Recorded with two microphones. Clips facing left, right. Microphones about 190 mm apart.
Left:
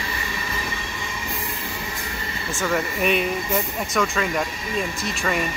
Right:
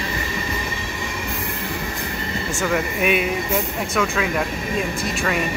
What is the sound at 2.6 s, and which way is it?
Speech, 5° right (ahead or behind).